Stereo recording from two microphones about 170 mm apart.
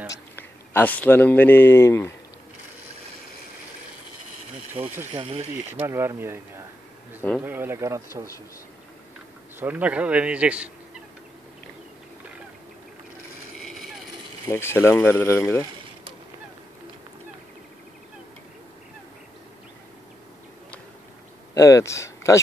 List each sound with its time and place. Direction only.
0.1 s a man's voice: 10° left (ahead or behind)
4.7 s a man's voice: 10° right (ahead or behind)
5.1 s speech: 35° right (ahead or behind)
5.9 s a man's voice: 15° right (ahead or behind)
9.6 s a man's voice: 10° right (ahead or behind)
13.6 s vehicle: centre (ahead or behind)
14.5 s speech: 15° left (ahead or behind)
21.5 s speech: 20° left (ahead or behind)